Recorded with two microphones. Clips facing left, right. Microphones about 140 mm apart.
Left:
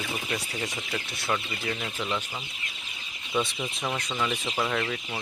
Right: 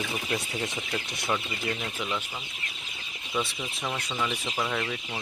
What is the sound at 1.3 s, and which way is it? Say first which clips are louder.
Speech: even; 5° right (ahead or behind).